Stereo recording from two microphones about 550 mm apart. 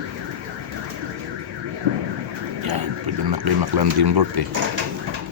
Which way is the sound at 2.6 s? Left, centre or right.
Right.